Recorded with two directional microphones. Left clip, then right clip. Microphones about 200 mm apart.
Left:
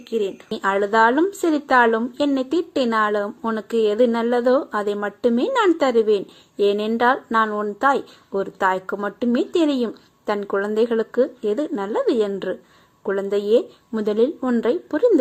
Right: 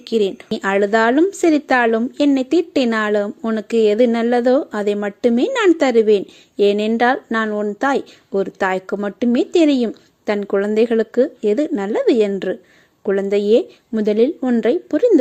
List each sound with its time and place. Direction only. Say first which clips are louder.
0.1 s a woman's voice: right 5 dB; 40° right (ahead or behind)